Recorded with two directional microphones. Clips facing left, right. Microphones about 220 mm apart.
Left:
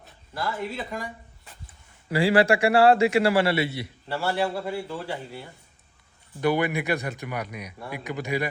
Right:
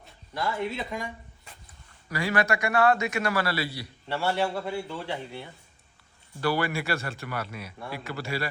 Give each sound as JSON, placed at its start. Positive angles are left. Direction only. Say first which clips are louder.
{"t": 0.3, "sound": "a man's voice", "louder": "right 1 dB", "side_deg": 0}
{"t": 2.0, "sound": "a man's voice", "louder": "left 7 dB", "side_deg": 30}
{"t": 4.1, "sound": "a man's voice", "louder": "left 1 dB", "side_deg": 5}
{"t": 6.4, "sound": "a man's voice", "louder": "left 4 dB", "side_deg": 20}